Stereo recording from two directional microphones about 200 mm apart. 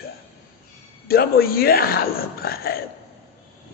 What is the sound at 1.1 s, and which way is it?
A man's voice, 50° left (ahead or behind).